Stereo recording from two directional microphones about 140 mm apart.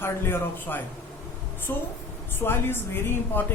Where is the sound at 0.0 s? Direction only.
15° left (ahead or behind).